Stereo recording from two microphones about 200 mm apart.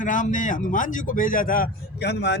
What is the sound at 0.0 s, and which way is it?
A man's voice, 40° left (ahead or behind).